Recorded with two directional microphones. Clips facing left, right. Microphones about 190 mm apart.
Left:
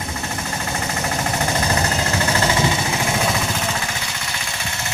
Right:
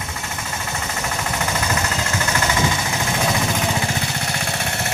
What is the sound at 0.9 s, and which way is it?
Jackhammer, 35° left (ahead or behind).